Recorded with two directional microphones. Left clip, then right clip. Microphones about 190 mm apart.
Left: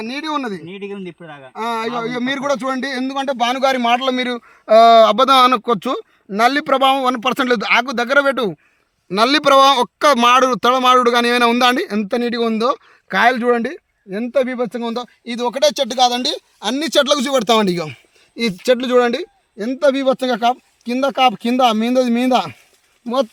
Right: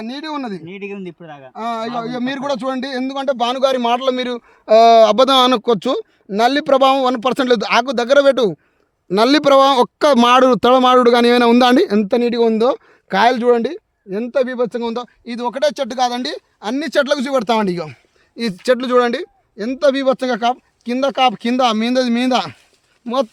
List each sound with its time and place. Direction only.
0.0 s a man's voice: 40° right (ahead or behind)
0.7 s speech: 10° right (ahead or behind)
2.0 s a man's voice: 35° right (ahead or behind)
15.2 s speech: 30° left (ahead or behind)
18.6 s speech: 20° left (ahead or behind); by 23.3 s 5° left (ahead or behind)